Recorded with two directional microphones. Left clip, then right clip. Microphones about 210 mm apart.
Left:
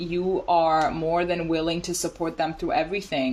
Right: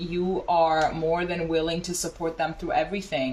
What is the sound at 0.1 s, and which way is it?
Speech, 50° left (ahead or behind).